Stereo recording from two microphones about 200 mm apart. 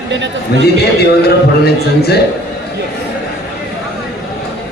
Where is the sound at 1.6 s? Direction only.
55° left (ahead or behind).